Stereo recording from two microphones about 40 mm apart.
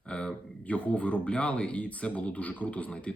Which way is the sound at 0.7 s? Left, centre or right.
Left.